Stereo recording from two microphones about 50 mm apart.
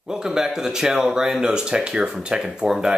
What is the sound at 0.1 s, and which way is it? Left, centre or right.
Speech, centre.